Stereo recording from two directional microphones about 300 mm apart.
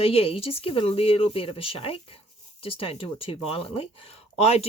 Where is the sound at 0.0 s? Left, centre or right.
Centre.